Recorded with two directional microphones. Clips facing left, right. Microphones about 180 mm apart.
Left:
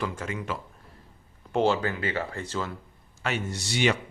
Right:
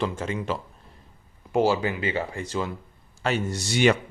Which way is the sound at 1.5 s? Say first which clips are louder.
Right 2 dB; 10° right (ahead or behind).